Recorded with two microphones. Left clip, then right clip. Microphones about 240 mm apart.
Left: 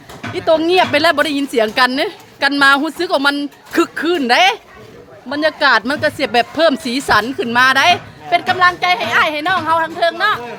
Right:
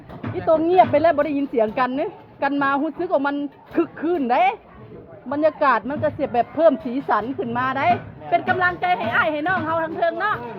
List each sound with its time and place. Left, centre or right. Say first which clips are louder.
0.6 s a woman's voice: even; left
5.9 s a woman's voice: left 7 dB; left
8.3 s a woman's voice: left 6 dB; centre